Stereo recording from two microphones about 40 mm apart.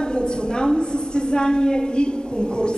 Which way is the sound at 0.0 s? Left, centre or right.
Left.